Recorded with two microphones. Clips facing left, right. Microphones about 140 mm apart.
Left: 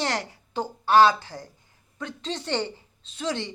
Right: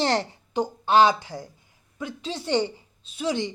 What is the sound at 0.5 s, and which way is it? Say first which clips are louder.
A woman's voice: even; 15° right (ahead or behind).